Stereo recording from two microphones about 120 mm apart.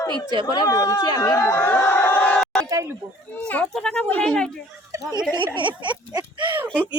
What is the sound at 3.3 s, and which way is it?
Speech, 10° left (ahead or behind).